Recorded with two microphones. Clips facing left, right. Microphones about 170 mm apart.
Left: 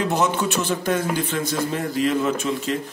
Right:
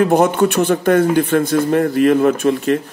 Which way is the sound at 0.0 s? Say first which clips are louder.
Right 9 dB; 55° right (ahead or behind).